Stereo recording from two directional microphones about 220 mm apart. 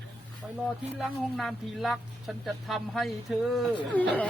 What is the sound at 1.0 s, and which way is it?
Speech, centre (ahead or behind).